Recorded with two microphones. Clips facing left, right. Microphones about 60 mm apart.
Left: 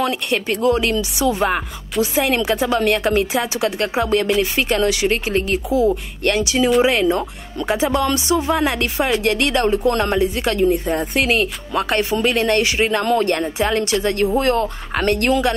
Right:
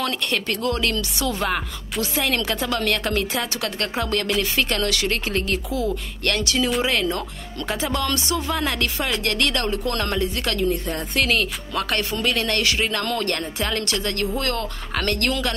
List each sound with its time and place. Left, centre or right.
0.0 s speech: centre